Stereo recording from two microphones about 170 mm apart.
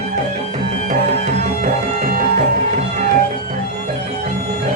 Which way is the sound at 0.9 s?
45° right (ahead or behind).